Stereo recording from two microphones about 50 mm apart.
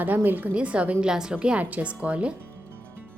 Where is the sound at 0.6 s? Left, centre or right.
Right.